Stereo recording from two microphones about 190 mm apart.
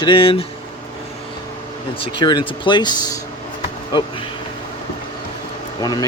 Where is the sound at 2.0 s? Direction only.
25° left (ahead or behind).